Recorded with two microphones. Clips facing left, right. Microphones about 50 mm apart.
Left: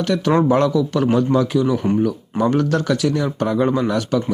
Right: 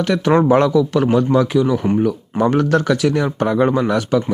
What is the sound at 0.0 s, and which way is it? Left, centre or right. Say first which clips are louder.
Speech: right 2 dB; right.